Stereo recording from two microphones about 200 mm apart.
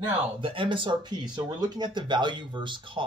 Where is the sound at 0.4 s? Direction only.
25° right (ahead or behind).